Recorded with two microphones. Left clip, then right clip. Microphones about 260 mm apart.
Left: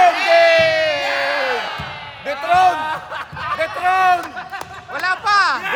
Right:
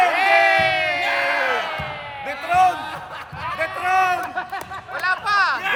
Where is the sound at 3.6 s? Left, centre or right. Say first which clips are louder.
Left 3 dB; left.